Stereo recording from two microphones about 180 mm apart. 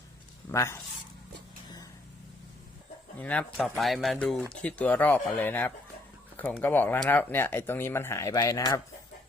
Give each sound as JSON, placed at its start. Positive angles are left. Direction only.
{"t": 0.5, "sound": "speech", "side_deg": 15}
{"t": 3.2, "sound": "speech", "side_deg": 10}